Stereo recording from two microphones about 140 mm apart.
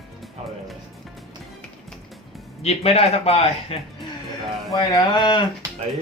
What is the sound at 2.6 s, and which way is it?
Speech, 45° left (ahead or behind).